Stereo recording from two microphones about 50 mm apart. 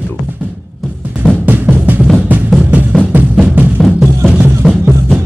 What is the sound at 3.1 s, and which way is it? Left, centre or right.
Music, right.